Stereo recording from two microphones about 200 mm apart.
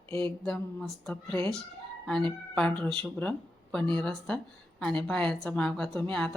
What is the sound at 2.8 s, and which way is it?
Speech, 25° right (ahead or behind).